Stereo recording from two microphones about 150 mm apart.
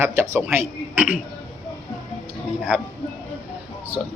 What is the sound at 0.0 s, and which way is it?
Speech, 15° right (ahead or behind).